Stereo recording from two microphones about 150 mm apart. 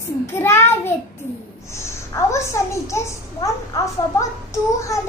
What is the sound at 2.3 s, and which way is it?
A child's voice, 20° left (ahead or behind).